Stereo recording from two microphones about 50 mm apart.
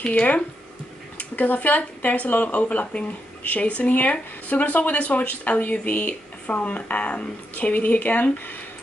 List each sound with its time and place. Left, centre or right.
0.0 s speech: left